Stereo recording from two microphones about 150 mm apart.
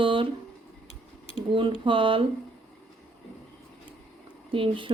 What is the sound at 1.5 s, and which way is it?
Speech, 35° right (ahead or behind).